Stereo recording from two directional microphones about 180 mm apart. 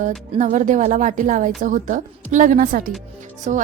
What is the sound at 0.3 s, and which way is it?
A woman's voice, 45° right (ahead or behind).